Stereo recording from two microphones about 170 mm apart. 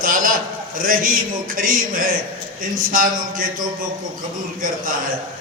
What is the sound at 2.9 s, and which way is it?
Speech, 55° right (ahead or behind).